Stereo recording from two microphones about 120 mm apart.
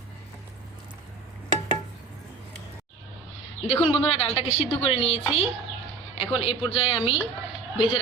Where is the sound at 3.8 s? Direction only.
55° left (ahead or behind).